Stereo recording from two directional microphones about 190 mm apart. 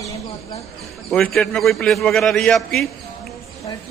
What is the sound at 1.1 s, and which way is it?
Speech, 5° left (ahead or behind).